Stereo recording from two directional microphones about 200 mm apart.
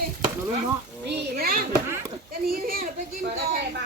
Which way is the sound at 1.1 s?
55° right (ahead or behind).